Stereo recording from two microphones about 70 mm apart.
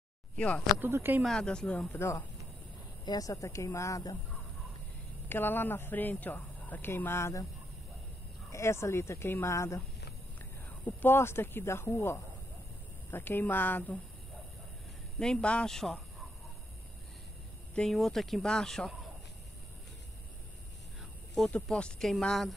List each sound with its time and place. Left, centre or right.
0.7 s speech: right
1.2 s speech: centre
1.9 s speech: left
3.1 s speech: left
5.3 s speech: left
8.5 s speech: left
10.9 s speech: left
15.1 s speech: centre
17.7 s speech: centre
21.5 s speech: centre